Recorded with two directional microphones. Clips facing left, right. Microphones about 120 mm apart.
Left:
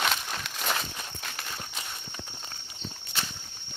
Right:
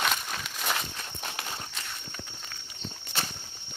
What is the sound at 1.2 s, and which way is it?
Walk, 20° right (ahead or behind).